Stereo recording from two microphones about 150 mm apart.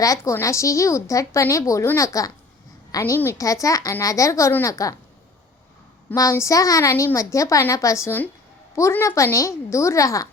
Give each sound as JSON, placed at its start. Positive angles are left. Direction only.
{"t": 0.0, "sound": "a woman's voice", "side_deg": 20}
{"t": 6.1, "sound": "a woman's voice", "side_deg": 20}